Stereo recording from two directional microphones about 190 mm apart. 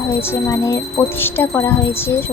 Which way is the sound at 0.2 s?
10° left (ahead or behind).